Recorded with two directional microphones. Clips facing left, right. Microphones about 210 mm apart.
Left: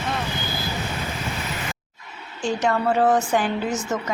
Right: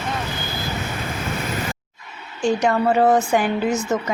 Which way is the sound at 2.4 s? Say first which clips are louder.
Right 4 dB; 15° right (ahead or behind).